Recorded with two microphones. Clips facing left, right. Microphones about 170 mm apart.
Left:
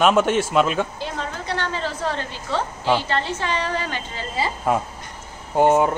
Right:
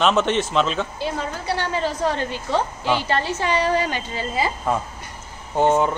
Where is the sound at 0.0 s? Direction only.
10° left (ahead or behind).